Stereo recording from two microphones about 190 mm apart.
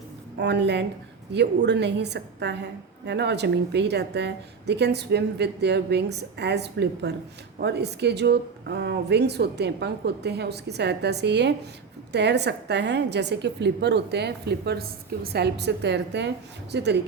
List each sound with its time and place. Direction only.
0.3 s a woman's voice: 65° right (ahead or behind)